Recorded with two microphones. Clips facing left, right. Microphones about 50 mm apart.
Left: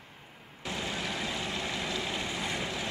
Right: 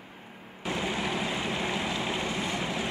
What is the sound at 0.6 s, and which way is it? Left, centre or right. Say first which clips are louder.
Vehicle: right 4 dB; centre.